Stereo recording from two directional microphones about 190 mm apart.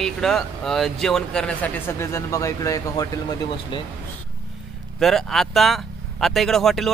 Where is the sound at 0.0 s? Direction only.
Centre (ahead or behind); by 3.8 s 20° left (ahead or behind).